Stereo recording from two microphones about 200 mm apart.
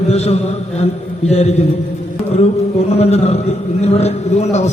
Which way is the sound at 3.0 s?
30° left (ahead or behind).